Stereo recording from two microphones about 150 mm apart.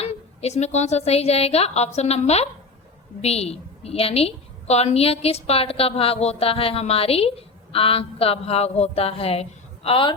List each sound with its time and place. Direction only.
0.0 s a woman's voice: 45° left (ahead or behind)